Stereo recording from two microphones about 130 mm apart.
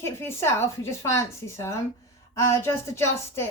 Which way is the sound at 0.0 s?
20° left (ahead or behind).